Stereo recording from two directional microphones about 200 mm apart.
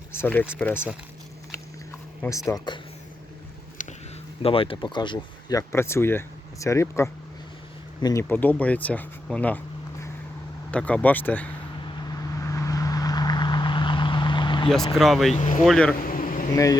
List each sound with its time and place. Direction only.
0.1 s speech: 10° left (ahead or behind)
2.5 s speech: 20° left (ahead or behind)
3.8 s a sound: 40° left (ahead or behind)
4.4 s speech: 25° left (ahead or behind); by 9.6 s 5° left (ahead or behind)
10.7 s speech: 5° left (ahead or behind)
12.4 s vehicle: 15° left (ahead or behind)
14.9 s speech: centre (ahead or behind)
16.0 s a sound: 45° left (ahead or behind)